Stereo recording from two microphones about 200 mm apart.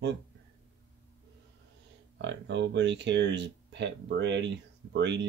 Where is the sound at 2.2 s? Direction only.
60° right (ahead or behind).